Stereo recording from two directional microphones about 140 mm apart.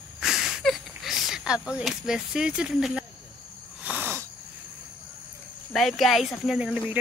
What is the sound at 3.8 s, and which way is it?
Wheeze, 10° right (ahead or behind).